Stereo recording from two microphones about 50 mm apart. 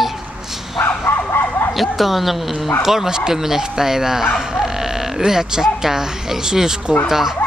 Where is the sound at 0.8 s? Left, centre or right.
Left.